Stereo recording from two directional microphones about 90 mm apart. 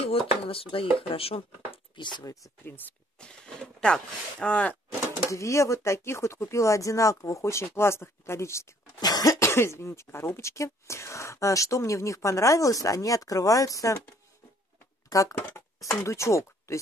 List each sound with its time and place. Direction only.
0.0 s speech: 90° left; by 2.2 s 60° left (ahead or behind)
3.2 s speech: 10° left (ahead or behind)
5.3 s speech: 35° left (ahead or behind)
9.0 s speech: 45° left (ahead or behind)